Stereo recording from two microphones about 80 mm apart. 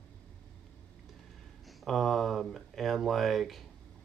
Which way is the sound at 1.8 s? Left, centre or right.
Centre.